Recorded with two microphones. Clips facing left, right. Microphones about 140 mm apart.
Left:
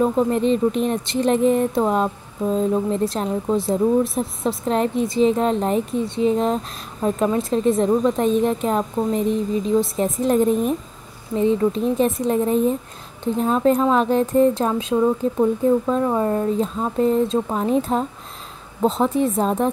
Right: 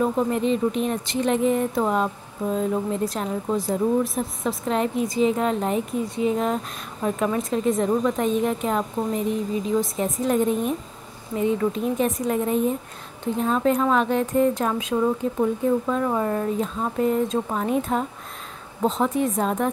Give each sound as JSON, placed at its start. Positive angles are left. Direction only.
{"t": 0.0, "sound": "a woman's voice", "side_deg": 35}
{"t": 14.9, "sound": "speech", "side_deg": 15}
{"t": 15.9, "sound": "a woman's voice", "side_deg": 25}